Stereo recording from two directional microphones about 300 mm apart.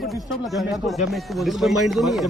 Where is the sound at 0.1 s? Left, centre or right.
Centre.